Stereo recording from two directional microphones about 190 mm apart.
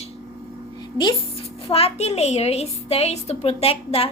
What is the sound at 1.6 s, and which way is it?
Child singing, 30° left (ahead or behind).